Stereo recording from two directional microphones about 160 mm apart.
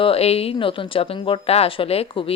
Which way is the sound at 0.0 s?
40° left (ahead or behind).